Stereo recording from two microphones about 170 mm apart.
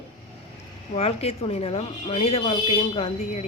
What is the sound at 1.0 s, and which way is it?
Speech, 35° left (ahead or behind).